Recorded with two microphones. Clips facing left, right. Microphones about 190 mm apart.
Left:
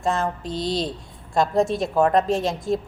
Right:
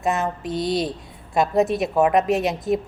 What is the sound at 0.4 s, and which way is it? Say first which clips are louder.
Speech: right 2 dB; 25° left (ahead or behind).